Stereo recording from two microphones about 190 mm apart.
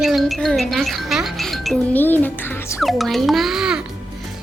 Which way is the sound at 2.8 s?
Centre (ahead or behind).